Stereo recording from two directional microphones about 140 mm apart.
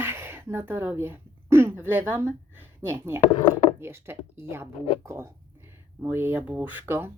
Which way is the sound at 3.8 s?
15° right (ahead or behind).